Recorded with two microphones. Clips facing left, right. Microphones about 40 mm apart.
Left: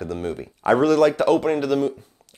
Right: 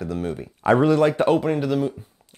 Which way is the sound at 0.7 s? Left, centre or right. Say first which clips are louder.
Left 2 dB; right.